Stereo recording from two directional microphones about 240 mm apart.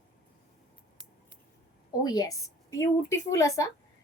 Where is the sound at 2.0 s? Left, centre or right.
Centre.